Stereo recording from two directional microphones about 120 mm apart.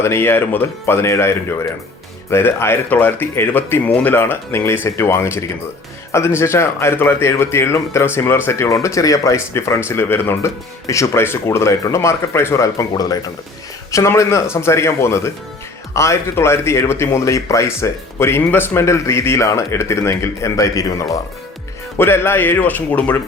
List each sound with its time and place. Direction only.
0.0 s speech: 20° left (ahead or behind)
13.9 s speech: 25° left (ahead or behind)